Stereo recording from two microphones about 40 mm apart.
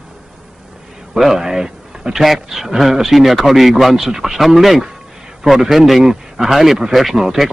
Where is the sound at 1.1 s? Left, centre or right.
Centre.